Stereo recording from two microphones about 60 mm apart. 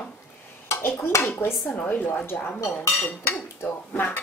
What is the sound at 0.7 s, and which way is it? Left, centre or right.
Speech, left.